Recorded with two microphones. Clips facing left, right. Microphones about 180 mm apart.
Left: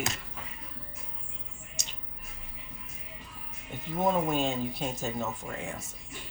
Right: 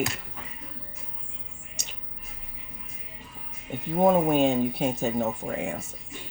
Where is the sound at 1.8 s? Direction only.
60° right (ahead or behind).